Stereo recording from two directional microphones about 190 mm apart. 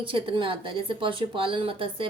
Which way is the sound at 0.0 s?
25° right (ahead or behind).